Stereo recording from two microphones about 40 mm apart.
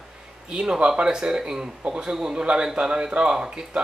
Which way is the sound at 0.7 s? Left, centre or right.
Right.